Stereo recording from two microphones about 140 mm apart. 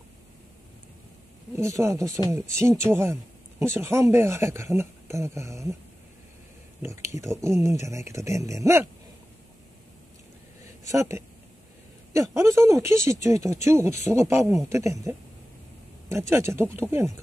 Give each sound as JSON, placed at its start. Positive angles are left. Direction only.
{"t": 1.5, "sound": "speech", "side_deg": -20}
{"t": 6.8, "sound": "speech", "side_deg": -20}
{"t": 10.9, "sound": "speech", "side_deg": -20}